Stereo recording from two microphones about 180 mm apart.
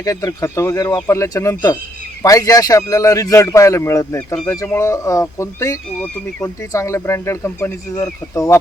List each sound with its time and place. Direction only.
0.0 s speech: 20° left (ahead or behind)